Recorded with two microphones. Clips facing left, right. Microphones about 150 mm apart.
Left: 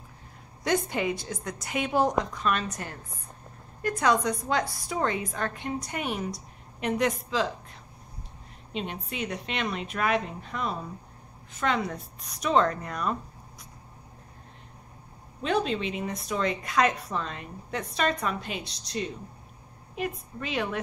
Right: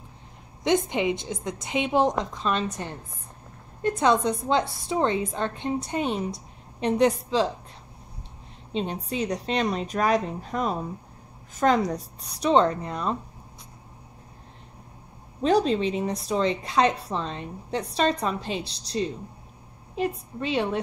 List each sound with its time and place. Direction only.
0.7 s a woman's voice: 20° right (ahead or behind)
8.7 s a woman's voice: 35° right (ahead or behind)
15.4 s a woman's voice: 35° right (ahead or behind)